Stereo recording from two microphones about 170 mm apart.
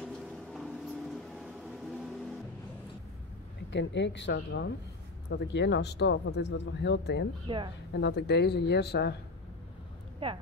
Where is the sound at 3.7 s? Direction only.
90° left.